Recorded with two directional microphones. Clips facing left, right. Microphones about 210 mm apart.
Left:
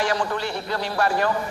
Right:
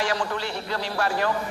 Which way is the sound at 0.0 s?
55° left (ahead or behind).